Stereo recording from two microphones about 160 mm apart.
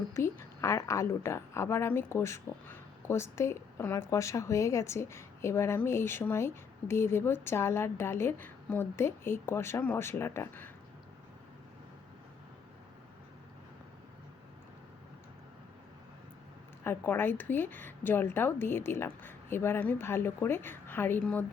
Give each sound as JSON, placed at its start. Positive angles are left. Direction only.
{"t": 0.1, "sound": "a woman's voice", "side_deg": 15}
{"t": 16.8, "sound": "a woman's voice", "side_deg": 15}